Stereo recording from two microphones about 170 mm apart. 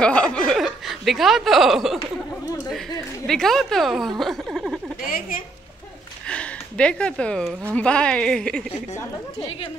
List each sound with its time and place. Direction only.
0.0 s chuckle: 5° left (ahead or behind)
3.3 s a woman's voice: 5° left (ahead or behind)
4.2 s a sound: centre (ahead or behind)
5.0 s a woman's voice: 55° left (ahead or behind)
6.2 s a sound: 5° left (ahead or behind)
7.7 s a woman's voice: 5° left (ahead or behind)